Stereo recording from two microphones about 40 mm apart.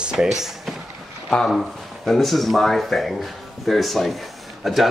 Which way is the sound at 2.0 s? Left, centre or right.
Centre.